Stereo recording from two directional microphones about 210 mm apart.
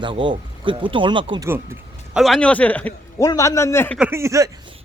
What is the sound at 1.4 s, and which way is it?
Speech, 10° right (ahead or behind).